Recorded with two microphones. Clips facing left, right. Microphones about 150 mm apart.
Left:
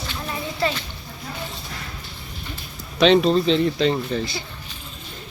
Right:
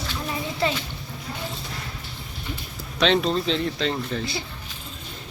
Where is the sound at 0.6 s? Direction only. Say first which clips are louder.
Left 1 dB; 15° right (ahead or behind).